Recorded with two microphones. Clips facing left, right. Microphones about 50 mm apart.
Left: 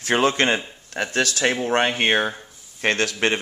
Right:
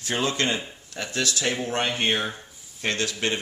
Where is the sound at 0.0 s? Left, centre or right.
Left.